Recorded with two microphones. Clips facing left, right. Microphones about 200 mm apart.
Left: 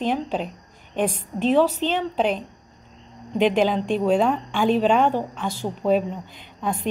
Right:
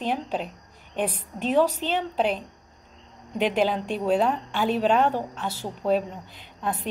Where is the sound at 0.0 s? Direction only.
40° left (ahead or behind).